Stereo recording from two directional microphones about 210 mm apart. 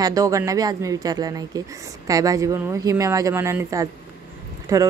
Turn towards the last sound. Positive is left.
turn(degrees=-15)  # may be behind; listen again after turning